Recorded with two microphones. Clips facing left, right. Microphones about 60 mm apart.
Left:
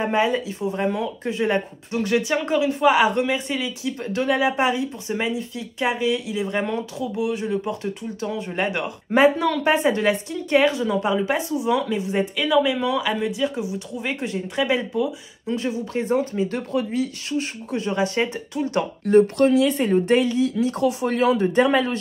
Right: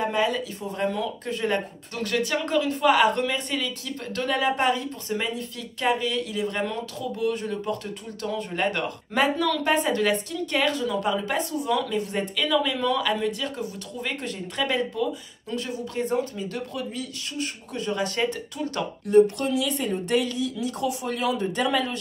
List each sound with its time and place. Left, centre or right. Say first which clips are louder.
0.0 s speech: left 4 dB; left; by 15.0 s centre
15.4 s speech: left 6 dB; left
19.0 s speech: left 3 dB; left